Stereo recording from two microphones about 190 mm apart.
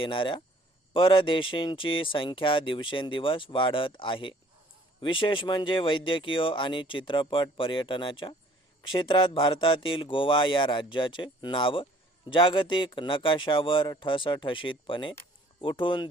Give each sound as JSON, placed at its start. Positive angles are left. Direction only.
{"t": 0.0, "sound": "speech", "side_deg": 25}